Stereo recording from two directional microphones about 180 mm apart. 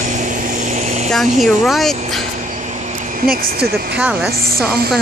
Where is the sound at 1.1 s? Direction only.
Centre (ahead or behind).